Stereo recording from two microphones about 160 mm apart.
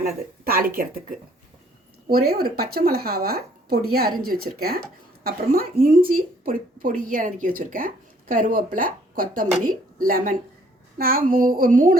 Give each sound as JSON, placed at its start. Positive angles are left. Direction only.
{"t": 0.0, "sound": "speech", "side_deg": -70}
{"t": 2.0, "sound": "a woman's voice", "side_deg": -70}